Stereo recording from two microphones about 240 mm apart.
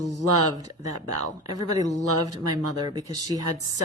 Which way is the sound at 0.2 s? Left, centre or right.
Right.